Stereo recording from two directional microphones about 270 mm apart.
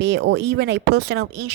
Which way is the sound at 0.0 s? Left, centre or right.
Right.